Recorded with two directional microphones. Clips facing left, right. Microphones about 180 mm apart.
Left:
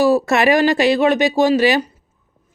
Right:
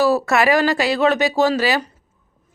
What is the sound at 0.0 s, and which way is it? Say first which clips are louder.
Speech: left 2 dB; 15° left (ahead or behind).